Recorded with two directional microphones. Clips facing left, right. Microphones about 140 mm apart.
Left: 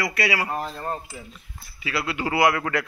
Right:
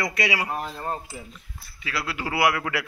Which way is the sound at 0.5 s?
5° right (ahead or behind).